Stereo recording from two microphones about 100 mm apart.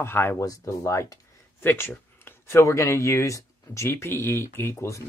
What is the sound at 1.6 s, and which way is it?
Speech, 20° left (ahead or behind).